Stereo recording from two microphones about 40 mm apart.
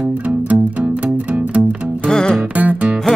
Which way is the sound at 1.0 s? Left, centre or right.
Right.